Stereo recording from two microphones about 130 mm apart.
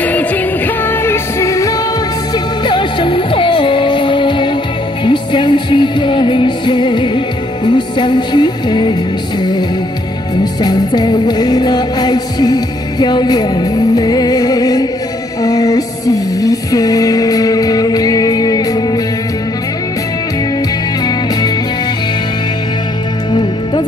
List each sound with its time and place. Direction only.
0.0 s music: 10° left (ahead or behind)
2.3 s music: 35° left (ahead or behind)